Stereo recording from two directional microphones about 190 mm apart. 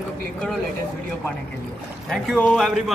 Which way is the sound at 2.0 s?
5° left (ahead or behind).